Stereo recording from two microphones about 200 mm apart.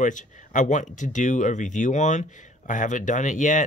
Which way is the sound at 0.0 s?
40° left (ahead or behind).